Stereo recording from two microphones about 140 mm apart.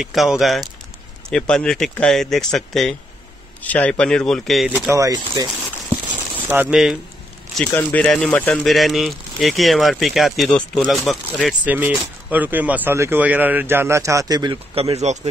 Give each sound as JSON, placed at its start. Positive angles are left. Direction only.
{"t": 0.0, "sound": "speech", "side_deg": -5}
{"t": 4.6, "sound": "speech", "side_deg": -10}
{"t": 4.9, "sound": "speech", "side_deg": -25}
{"t": 6.3, "sound": "speech", "side_deg": -10}
{"t": 7.7, "sound": "speech", "side_deg": 10}
{"t": 12.3, "sound": "speech", "side_deg": -10}
{"t": 14.8, "sound": "speech", "side_deg": -50}